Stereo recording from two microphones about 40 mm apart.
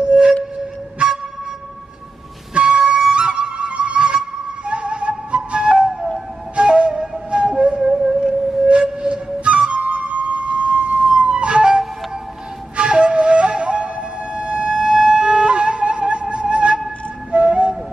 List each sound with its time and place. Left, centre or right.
0.0 s music: right
2.5 s music: right
5.9 s music: centre
6.5 s flute: right
7.9 s a sound: centre
9.0 s flute: right
14.3 s wind instrument: right
17.3 s flute: right